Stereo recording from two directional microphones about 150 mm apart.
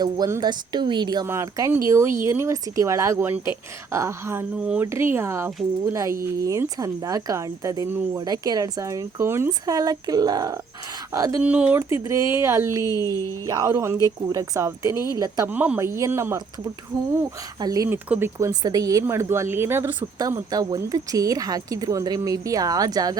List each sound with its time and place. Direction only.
0.0 s speech: 25° right (ahead or behind)
11.4 s speech: 10° right (ahead or behind)
15.4 s speech: 10° right (ahead or behind)
17.8 s speech: 15° right (ahead or behind)
20.1 s speech: 25° right (ahead or behind)